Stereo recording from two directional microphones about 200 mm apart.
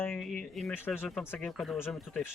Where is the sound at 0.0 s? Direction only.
Centre (ahead or behind).